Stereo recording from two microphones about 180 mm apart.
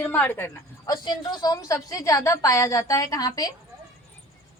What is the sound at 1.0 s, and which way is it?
A woman's voice, 20° left (ahead or behind).